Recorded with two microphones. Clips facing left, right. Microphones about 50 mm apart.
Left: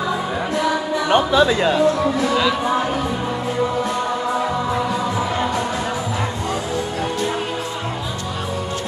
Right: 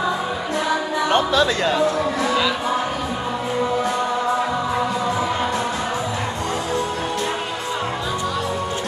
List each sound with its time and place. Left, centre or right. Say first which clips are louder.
1.0 s speech: left 3 dB; centre